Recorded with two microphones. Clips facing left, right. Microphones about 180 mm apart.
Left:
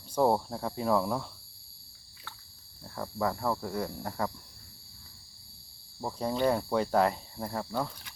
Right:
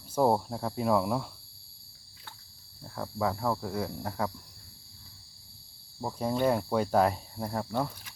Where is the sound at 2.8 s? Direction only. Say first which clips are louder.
Right 1 dB; centre (ahead or behind).